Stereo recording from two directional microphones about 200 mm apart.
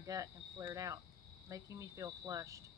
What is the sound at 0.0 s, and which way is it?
Cricket, 15° right (ahead or behind).